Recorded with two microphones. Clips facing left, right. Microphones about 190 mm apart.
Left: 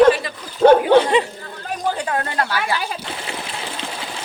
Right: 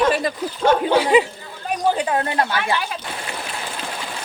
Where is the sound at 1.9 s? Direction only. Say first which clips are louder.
Right 2 dB; 20° right (ahead or behind).